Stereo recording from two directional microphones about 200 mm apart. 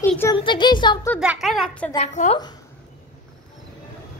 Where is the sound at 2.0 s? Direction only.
35° left (ahead or behind).